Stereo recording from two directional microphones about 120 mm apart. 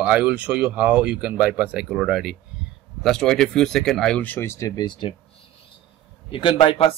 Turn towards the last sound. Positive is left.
turn(degrees=45)  # may be behind; listen again after turning